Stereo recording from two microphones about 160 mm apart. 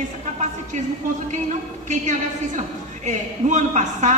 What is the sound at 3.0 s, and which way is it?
A man's voice, 50° right (ahead or behind).